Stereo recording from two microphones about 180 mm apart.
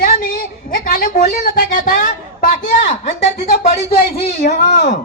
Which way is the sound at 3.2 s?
65° left (ahead or behind).